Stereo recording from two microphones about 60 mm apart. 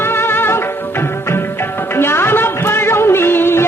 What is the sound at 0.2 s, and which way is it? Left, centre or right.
Music, left.